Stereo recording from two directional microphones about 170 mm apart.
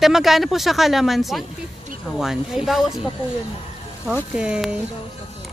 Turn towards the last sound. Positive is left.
turn(degrees=-5)  # may be behind; listen again after turning